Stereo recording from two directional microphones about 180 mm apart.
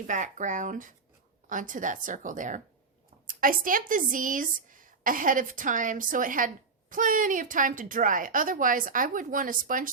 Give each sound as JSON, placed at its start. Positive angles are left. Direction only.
{"t": 0.1, "sound": "a woman's voice", "side_deg": -45}